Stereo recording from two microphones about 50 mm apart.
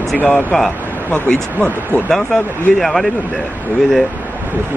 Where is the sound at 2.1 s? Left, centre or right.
Centre.